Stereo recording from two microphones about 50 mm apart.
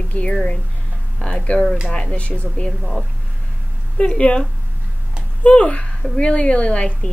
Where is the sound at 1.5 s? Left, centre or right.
Left.